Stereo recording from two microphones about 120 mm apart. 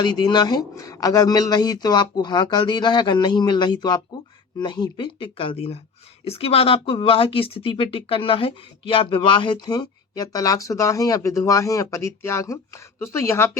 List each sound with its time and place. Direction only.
0.0 s speech: 35° left (ahead or behind); by 13.5 s 20° left (ahead or behind)